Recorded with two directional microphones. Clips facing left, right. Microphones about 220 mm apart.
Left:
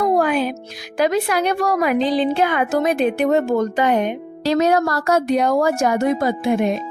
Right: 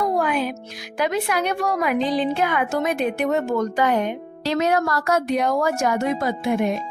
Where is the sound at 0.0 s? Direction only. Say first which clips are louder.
Left 4 dB; 35° left (ahead or behind).